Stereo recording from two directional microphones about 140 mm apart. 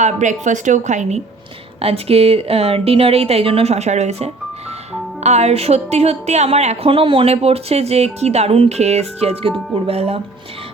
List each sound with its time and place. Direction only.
0.0 s a woman's voice: 60° right (ahead or behind)
1.8 s a woman's voice: 45° right (ahead or behind)